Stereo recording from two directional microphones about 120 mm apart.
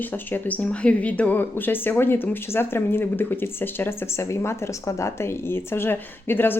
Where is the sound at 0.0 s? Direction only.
15° left (ahead or behind).